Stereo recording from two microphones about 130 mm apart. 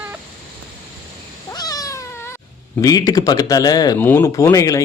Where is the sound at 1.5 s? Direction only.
30° left (ahead or behind).